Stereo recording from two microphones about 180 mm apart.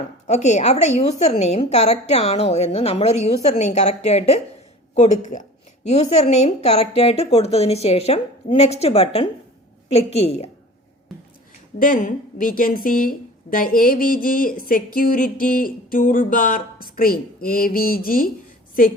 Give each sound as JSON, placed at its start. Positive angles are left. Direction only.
{"t": 0.3, "sound": "a woman's voice", "side_deg": 40}
{"t": 11.8, "sound": "a woman's voice", "side_deg": 50}